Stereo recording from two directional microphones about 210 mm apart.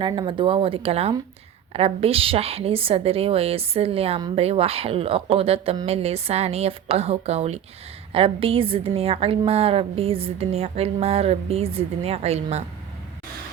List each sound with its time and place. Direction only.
0.0 s a woman's voice: 25° right (ahead or behind)